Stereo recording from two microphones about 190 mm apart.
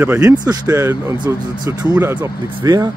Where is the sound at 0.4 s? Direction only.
20° right (ahead or behind).